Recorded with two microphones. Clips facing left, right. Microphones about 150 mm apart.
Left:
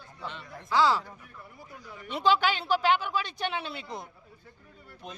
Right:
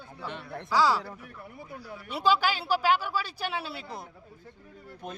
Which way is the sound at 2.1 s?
10° right (ahead or behind).